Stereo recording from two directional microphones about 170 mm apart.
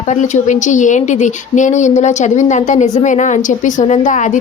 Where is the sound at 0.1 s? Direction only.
45° left (ahead or behind).